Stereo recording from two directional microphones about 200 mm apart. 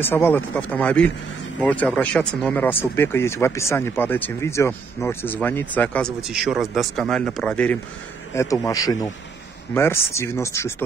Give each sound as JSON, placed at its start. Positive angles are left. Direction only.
{"t": 0.0, "sound": "speech", "side_deg": 10}